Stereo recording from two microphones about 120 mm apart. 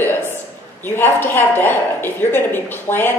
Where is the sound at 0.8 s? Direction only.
20° left (ahead or behind).